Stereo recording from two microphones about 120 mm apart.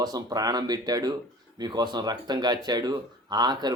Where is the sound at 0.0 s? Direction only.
30° right (ahead or behind).